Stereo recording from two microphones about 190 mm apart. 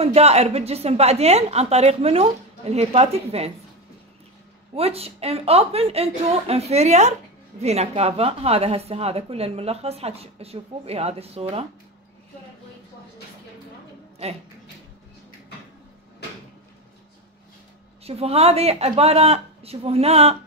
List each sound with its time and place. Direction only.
0.0 s a woman's voice: 35° right (ahead or behind)
4.7 s a woman's voice: 30° right (ahead or behind)
18.0 s a woman's voice: 35° right (ahead or behind)